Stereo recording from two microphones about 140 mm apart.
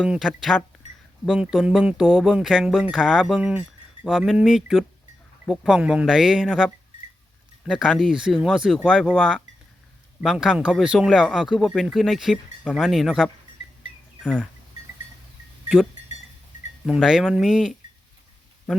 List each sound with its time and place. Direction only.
0.0 s speech: 5° right (ahead or behind)
7.8 s speech: centre (ahead or behind)
14.2 s goat: 5° left (ahead or behind)
16.8 s speech: 5° right (ahead or behind)